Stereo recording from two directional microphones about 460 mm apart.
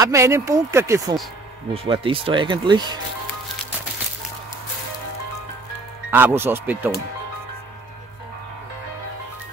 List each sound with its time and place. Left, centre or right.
0.0 s speech: centre
6.0 s speech: centre